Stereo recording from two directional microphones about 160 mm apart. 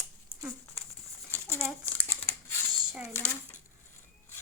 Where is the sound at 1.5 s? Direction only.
15° right (ahead or behind).